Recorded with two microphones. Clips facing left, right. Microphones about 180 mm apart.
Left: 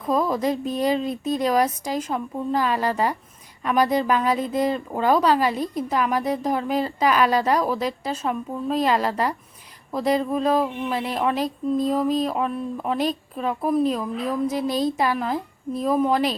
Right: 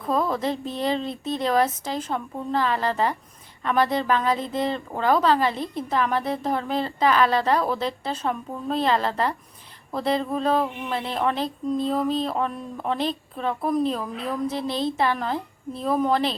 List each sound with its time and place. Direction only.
0.1 s a woman's voice: 10° left (ahead or behind)
1.0 s speech: 25° right (ahead or behind)
1.5 s a woman's voice: 15° left (ahead or behind)
14.5 s speech: 25° right (ahead or behind)
14.9 s a woman's voice: 10° left (ahead or behind)